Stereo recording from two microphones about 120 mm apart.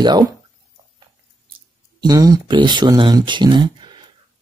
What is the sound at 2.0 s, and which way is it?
Speech, 35° right (ahead or behind).